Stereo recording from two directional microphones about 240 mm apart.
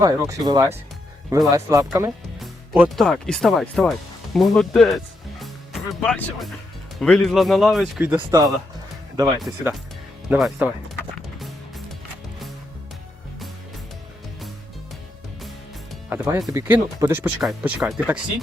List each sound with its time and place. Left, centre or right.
0.0 s speech: centre
5.4 s music: centre
7.0 s speech: centre
10.2 s speech: centre
11.3 s music: centre
15.9 s speech: centre